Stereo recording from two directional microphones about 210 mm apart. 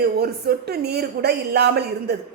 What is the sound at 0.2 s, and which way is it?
A woman's voice, 50° right (ahead or behind).